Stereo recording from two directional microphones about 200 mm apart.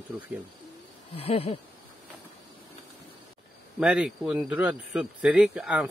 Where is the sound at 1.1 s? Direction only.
30° left (ahead or behind).